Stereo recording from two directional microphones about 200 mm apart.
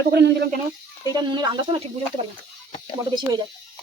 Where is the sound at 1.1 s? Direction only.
20° right (ahead or behind).